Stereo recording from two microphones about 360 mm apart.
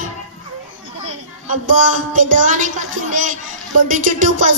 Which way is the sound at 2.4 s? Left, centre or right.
Right.